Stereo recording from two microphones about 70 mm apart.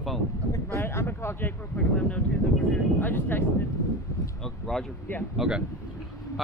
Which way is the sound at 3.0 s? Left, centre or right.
Left.